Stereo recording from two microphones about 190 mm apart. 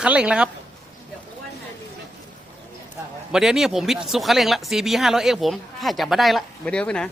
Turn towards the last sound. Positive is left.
turn(degrees=5)  # may be behind; listen again after turning